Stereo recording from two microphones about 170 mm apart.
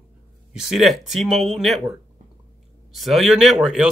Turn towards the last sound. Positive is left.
turn(degrees=-5)  # may be behind; listen again after turning